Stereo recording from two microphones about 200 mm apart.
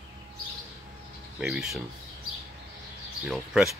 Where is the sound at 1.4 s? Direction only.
5° right (ahead or behind).